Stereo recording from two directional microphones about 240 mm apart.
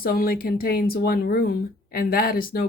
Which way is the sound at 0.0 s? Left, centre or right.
Left.